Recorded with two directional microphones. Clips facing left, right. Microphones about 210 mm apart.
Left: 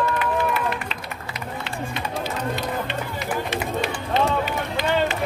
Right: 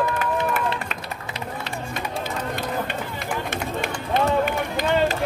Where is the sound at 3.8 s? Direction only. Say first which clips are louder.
Right 2 dB; 50° right (ahead or behind).